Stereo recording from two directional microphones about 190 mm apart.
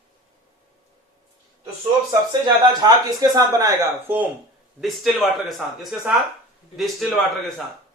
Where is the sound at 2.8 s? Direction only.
15° right (ahead or behind); by 7.6 s centre (ahead or behind).